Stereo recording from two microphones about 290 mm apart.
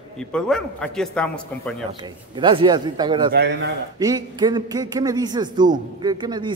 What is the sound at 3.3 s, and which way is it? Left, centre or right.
Speech, right.